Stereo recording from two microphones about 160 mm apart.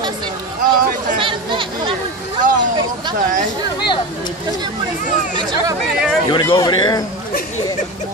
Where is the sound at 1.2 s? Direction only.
30° right (ahead or behind).